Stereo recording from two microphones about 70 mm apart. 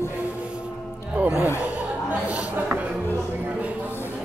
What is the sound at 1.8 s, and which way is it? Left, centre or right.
Chatter, right.